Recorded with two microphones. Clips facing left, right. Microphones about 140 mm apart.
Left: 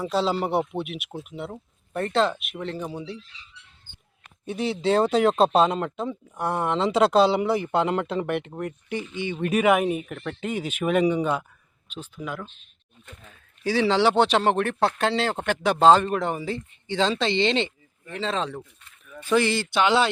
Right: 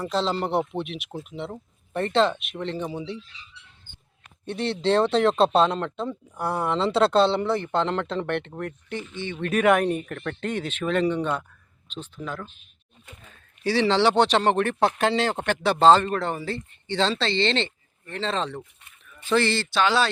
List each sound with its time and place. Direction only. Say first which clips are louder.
0.0 s speech: left 1 dB; 5° left (ahead or behind)
4.4 s speech: even; 5° left (ahead or behind)
13.1 s a sound: left 1 dB; 5° right (ahead or behind)
13.7 s speech: even; 10° left (ahead or behind)